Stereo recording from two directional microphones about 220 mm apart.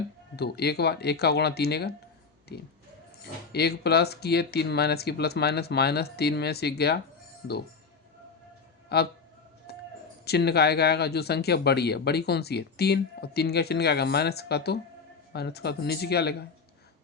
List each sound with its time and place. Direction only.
0.3 s speech: 45° left (ahead or behind)
8.9 s speech: 45° left (ahead or behind)
9.7 s a sound: 45° left (ahead or behind)
10.2 s speech: 45° left (ahead or behind)